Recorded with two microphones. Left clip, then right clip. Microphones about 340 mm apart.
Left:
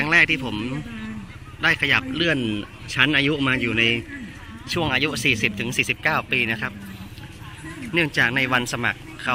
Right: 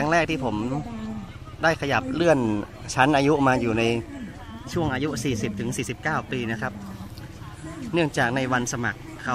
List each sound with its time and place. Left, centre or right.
0.0 s speech: centre
2.3 s speech: right
2.9 s speech: centre
7.9 s speech: centre